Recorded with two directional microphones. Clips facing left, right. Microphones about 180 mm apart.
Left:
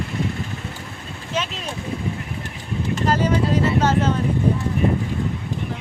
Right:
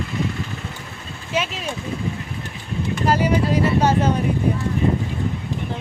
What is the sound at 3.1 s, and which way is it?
Speech, 10° right (ahead or behind).